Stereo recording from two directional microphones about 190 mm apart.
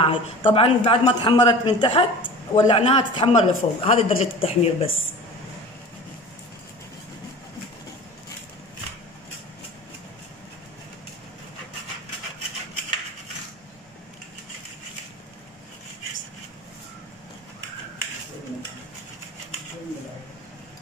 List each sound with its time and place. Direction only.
0.0 s a man's voice: 30° left (ahead or behind)